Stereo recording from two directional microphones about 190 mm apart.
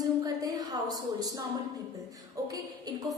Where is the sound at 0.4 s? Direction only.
20° right (ahead or behind).